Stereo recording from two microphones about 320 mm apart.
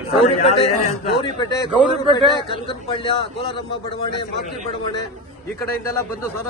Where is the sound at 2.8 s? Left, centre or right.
Centre.